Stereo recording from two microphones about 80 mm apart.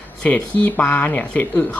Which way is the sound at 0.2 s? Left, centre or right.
Centre.